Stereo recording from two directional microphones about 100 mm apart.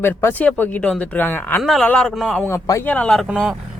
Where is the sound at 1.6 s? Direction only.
Centre (ahead or behind).